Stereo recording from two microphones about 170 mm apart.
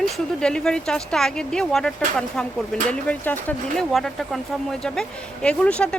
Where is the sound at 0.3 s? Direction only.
5° left (ahead or behind).